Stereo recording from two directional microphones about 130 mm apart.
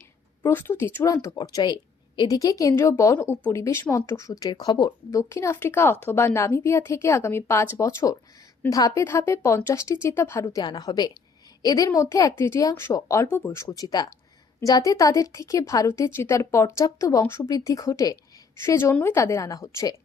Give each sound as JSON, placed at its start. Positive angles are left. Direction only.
{"t": 0.5, "sound": "a woman's voice", "side_deg": 15}
{"t": 3.2, "sound": "speech", "side_deg": 10}
{"t": 3.5, "sound": "a woman's voice", "side_deg": 20}
{"t": 5.3, "sound": "a woman's voice", "side_deg": 20}
{"t": 10.4, "sound": "a woman's voice", "side_deg": 30}